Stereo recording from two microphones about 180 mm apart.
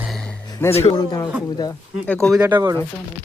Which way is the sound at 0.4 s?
20° left (ahead or behind).